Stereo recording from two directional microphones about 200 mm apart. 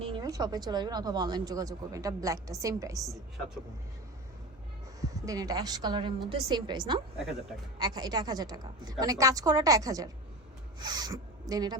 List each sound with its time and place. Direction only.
0.0 s speech: 20° right (ahead or behind)
4.9 s speech: 15° right (ahead or behind)